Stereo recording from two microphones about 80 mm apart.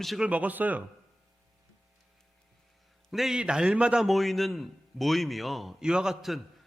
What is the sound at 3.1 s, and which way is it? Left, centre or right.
Speech, centre.